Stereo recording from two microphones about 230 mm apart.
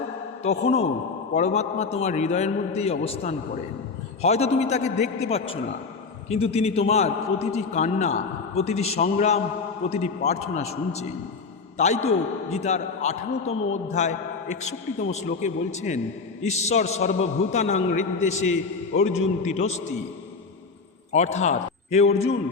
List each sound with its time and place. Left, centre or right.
0.4 s a man's voice: left
12.0 s a man's voice: left
21.1 s a man's voice: left